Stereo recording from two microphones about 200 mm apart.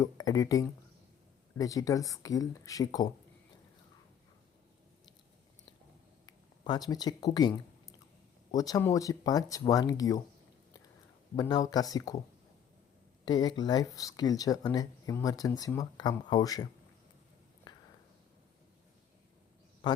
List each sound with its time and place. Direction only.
0.0 s speech: 20° left (ahead or behind)
6.2 s a sound: 20° left (ahead or behind)
7.3 s speech: 20° left (ahead or behind)
11.3 s speech: 20° left (ahead or behind)
13.2 s speech: 20° left (ahead or behind)
17.7 s a sound: 20° left (ahead or behind)
19.8 s speech: 20° left (ahead or behind)